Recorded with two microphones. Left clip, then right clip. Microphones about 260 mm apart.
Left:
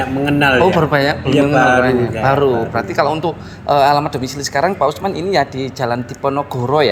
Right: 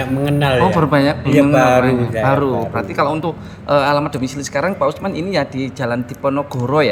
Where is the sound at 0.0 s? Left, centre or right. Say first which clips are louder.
Left 3 dB; right.